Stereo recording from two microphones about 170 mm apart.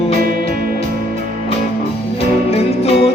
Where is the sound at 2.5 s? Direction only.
35° left (ahead or behind).